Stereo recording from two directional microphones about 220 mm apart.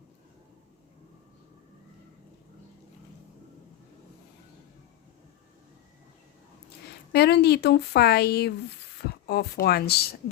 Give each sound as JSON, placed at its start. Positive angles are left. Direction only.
{"t": 7.1, "sound": "a woman's voice", "side_deg": 50}